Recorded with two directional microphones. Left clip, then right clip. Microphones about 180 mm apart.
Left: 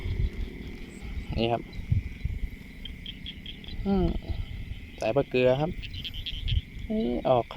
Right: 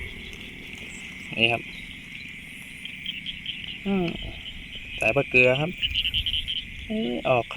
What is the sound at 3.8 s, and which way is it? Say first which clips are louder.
Speech: even; 10° left (ahead or behind).